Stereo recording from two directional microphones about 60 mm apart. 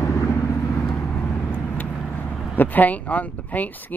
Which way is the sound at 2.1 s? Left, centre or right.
Left.